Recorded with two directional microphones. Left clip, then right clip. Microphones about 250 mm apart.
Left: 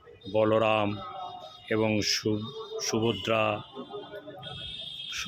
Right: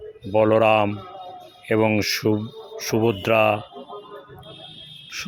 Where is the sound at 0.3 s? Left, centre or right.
Right.